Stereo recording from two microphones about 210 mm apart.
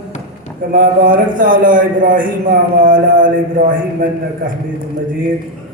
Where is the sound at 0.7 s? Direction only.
40° right (ahead or behind).